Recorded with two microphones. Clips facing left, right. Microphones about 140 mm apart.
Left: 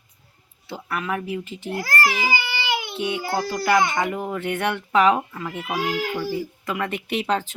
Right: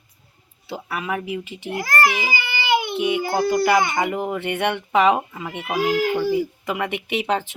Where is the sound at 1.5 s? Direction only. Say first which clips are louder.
Right 1 dB; 65° right (ahead or behind).